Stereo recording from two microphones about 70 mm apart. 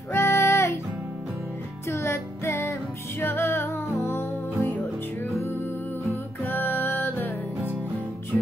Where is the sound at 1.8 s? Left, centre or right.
Left.